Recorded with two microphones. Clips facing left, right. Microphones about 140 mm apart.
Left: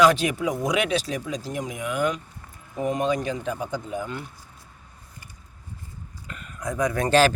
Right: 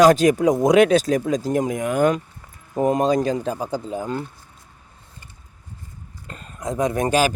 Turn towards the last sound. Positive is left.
turn(degrees=-10)  # may be behind; listen again after turning